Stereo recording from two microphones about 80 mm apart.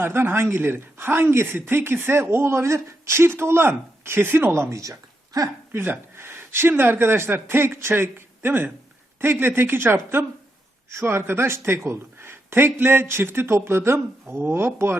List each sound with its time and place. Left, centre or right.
0.0 s speech: right
5.7 s a man's voice: right